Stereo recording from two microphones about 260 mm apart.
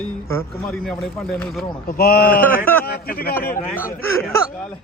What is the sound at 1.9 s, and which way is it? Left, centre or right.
Speech, left.